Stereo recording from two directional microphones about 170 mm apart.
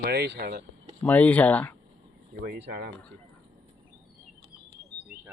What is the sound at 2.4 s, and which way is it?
Speech, 65° right (ahead or behind).